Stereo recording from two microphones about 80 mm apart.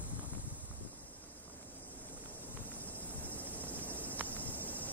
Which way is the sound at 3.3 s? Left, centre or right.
Left.